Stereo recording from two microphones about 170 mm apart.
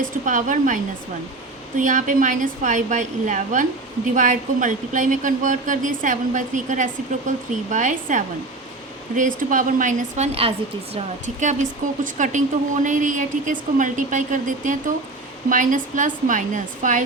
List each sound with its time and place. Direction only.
0.3 s speech: 50° right (ahead or behind)
1.8 s speech: 50° right (ahead or behind)